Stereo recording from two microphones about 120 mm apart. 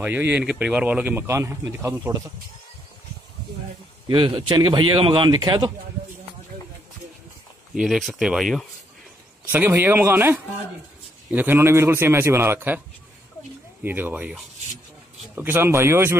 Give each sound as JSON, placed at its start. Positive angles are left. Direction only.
{"t": 0.0, "sound": "speech", "side_deg": -15}
{"t": 4.1, "sound": "a man's voice", "side_deg": -45}
{"t": 7.7, "sound": "speech", "side_deg": -5}
{"t": 9.5, "sound": "a man's voice", "side_deg": -15}
{"t": 13.8, "sound": "speech", "side_deg": -15}
{"t": 15.3, "sound": "a man's voice", "side_deg": -15}